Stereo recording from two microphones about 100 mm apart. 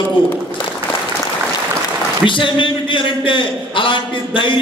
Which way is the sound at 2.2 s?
55° left (ahead or behind).